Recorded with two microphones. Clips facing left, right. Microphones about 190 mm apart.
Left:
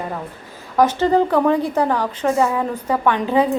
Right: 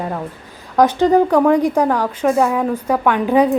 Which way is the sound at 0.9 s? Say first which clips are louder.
Right 3 dB; 15° right (ahead or behind).